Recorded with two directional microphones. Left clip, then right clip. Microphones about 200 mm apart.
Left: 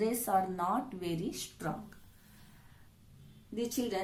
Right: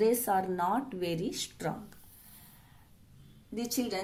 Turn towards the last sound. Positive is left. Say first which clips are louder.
# right 1 dB
turn(degrees=-25)  # may be behind; listen again after turning